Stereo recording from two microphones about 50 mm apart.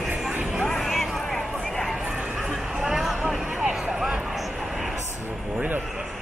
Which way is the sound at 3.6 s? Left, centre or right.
Centre.